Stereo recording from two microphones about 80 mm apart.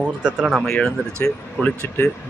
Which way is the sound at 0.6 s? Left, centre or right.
Centre.